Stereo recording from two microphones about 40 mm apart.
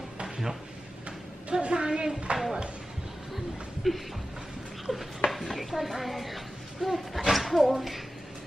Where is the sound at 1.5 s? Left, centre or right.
Right.